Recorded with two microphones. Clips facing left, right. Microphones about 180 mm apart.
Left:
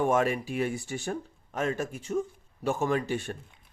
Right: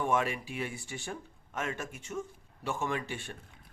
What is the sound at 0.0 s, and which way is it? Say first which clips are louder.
Speech: left 5 dB; 45° left (ahead or behind).